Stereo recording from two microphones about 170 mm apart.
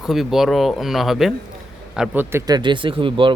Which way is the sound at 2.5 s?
25° right (ahead or behind).